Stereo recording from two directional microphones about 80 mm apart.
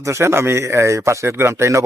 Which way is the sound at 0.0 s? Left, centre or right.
Right.